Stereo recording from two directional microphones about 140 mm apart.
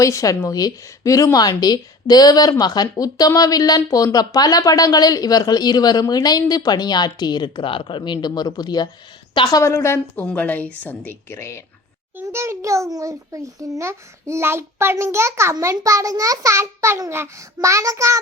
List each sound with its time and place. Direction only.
0.0 s a woman's voice: 25° left (ahead or behind)
9.6 s a woman's voice: 20° left (ahead or behind)
12.1 s a child's voice: 20° right (ahead or behind)